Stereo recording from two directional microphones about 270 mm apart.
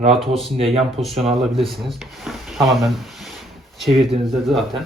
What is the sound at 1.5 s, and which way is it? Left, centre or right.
Speech, centre.